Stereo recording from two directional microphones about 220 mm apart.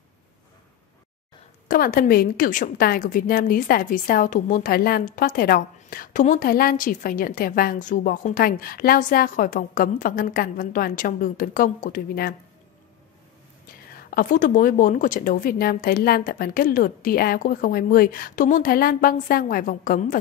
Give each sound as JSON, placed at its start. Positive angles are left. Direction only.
{"t": 1.7, "sound": "a woman's voice", "side_deg": 40}
{"t": 13.9, "sound": "a woman's voice", "side_deg": 40}